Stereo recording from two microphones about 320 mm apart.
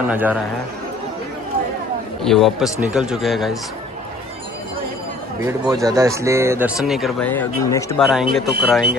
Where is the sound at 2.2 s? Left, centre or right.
Centre.